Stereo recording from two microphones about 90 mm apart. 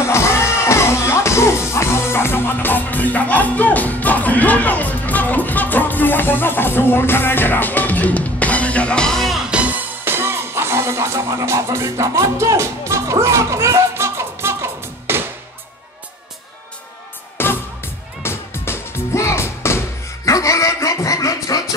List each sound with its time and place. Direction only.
0.0 s music: 30° left (ahead or behind); by 9.4 s 5° left (ahead or behind)
9.5 s music: 15° right (ahead or behind)
17.4 s music: 25° left (ahead or behind); by 21.6 s 40° left (ahead or behind)